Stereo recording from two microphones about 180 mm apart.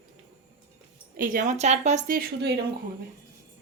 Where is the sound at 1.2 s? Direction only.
50° right (ahead or behind).